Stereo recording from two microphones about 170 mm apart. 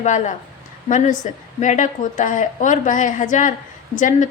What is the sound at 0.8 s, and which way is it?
A woman's voice, 45° left (ahead or behind).